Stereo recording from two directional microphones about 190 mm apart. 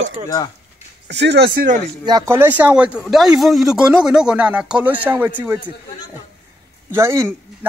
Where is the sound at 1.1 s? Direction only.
60° right (ahead or behind).